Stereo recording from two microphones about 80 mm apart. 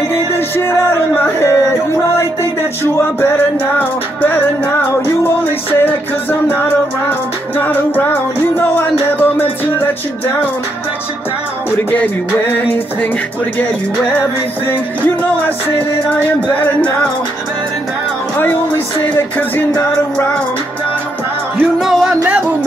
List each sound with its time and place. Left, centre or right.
0.1 s music: left
2.8 s music: left
7.1 s music: left
11.9 s music: left
14.7 s music: left
19.0 s music: left
21.7 s music: centre